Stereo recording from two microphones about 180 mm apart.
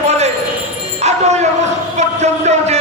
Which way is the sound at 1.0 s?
40° right (ahead or behind).